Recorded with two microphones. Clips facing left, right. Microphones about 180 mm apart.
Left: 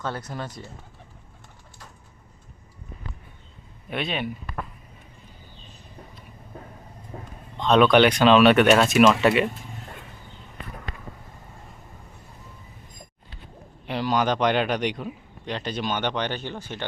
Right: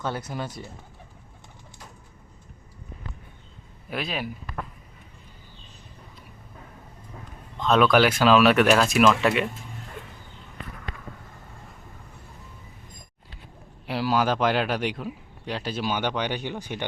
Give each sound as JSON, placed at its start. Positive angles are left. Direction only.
{"t": 0.0, "sound": "speech", "side_deg": -5}
{"t": 3.8, "sound": "speech", "side_deg": 0}
{"t": 7.1, "sound": "a sound", "side_deg": 40}
{"t": 7.6, "sound": "speech", "side_deg": 0}
{"t": 13.8, "sound": "speech", "side_deg": -5}